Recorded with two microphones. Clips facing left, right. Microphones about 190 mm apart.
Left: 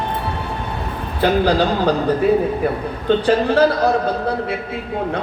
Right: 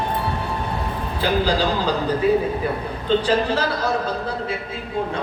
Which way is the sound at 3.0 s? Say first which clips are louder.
Left 4 dB; 60° left (ahead or behind).